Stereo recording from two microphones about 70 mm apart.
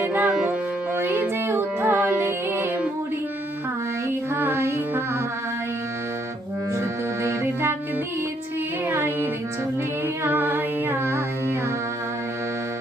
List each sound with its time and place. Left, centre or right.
0.0 s music: right
0.3 s music: centre
0.9 s music: right
4.4 s music: right
7.2 s music: right
8.9 s music: right
10.2 s music: right